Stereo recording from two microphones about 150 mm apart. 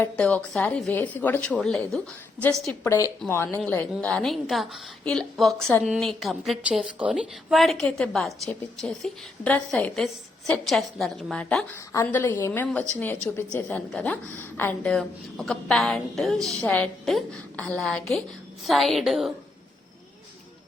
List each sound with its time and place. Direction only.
0.0 s a woman's voice: 10° left (ahead or behind)
2.8 s a woman's voice: 15° left (ahead or behind); by 19.3 s centre (ahead or behind)